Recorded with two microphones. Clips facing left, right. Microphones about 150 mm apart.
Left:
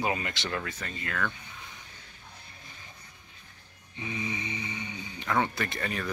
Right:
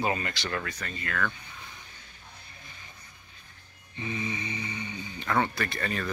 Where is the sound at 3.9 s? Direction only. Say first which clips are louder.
Right 1 dB; 15° left (ahead or behind).